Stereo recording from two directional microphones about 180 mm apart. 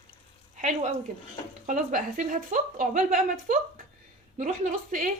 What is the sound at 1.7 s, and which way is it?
A woman's voice, 45° right (ahead or behind).